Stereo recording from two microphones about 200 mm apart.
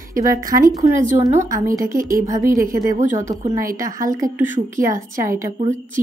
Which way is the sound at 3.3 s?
15° right (ahead or behind).